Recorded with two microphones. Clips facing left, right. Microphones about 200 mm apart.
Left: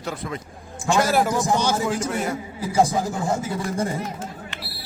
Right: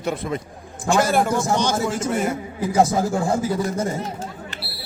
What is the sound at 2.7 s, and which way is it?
Speech, 45° right (ahead or behind).